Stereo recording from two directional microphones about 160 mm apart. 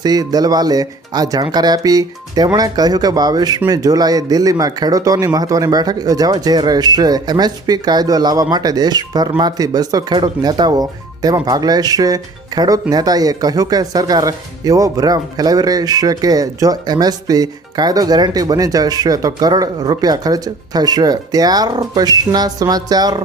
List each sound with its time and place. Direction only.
0.0 s speech: 25° right (ahead or behind)